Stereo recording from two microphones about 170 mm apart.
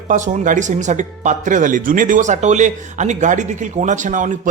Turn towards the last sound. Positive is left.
turn(degrees=-50)  # may be behind; listen again after turning